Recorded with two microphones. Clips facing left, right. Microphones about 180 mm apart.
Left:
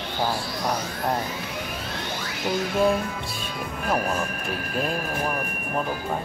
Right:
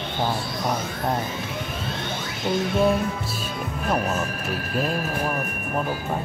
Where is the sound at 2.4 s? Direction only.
25° right (ahead or behind).